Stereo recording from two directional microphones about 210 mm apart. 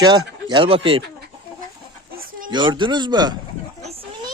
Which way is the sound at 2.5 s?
20° right (ahead or behind).